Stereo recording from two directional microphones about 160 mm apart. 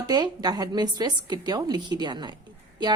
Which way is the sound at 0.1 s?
25° right (ahead or behind).